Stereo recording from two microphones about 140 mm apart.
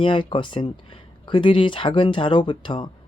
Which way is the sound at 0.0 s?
35° left (ahead or behind).